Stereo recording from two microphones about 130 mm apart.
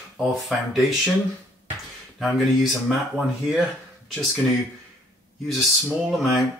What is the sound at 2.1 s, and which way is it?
Speech, centre (ahead or behind).